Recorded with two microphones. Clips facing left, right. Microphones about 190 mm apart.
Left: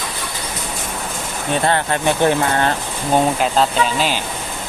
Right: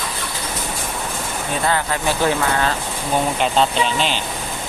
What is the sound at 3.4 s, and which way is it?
Speech, centre (ahead or behind).